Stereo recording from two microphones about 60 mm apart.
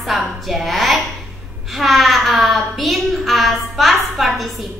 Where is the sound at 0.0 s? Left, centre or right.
Centre.